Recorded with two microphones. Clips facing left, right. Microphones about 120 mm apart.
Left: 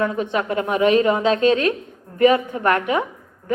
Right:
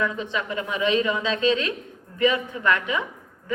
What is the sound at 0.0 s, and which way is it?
A woman's voice, 45° left (ahead or behind).